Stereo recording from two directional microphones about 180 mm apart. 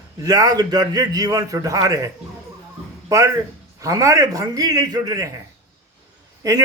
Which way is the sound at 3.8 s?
20° right (ahead or behind).